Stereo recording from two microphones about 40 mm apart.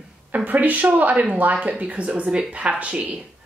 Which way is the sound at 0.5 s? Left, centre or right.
Right.